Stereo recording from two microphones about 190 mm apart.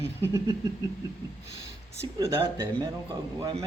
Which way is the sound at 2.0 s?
15° right (ahead or behind).